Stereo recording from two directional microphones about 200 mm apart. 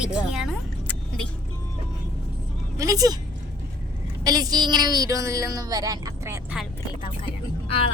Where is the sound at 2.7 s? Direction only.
15° right (ahead or behind).